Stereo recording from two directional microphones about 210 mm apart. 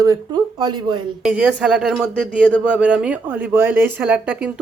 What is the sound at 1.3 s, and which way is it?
Speech, 5° right (ahead or behind).